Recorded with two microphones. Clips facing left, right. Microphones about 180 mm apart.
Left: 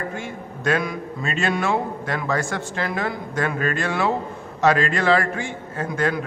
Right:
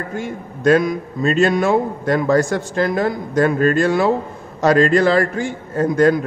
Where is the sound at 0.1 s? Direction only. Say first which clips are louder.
Right 5 dB; 40° right (ahead or behind).